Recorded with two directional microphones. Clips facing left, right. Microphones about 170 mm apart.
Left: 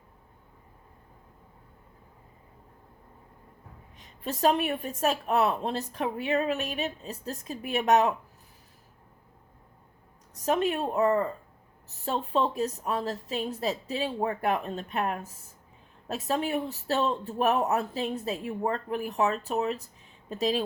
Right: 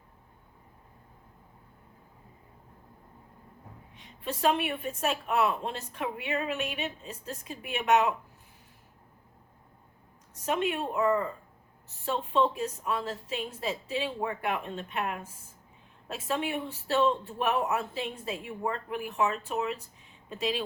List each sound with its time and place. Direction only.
3.9 s a woman's voice: 40° left (ahead or behind)
10.4 s a woman's voice: 40° left (ahead or behind)